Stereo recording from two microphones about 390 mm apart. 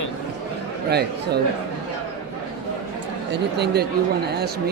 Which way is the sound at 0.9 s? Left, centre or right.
Right.